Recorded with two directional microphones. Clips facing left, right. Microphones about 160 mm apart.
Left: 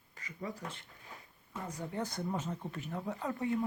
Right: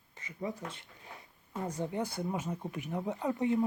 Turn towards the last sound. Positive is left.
turn(degrees=-20)  # may be behind; listen again after turning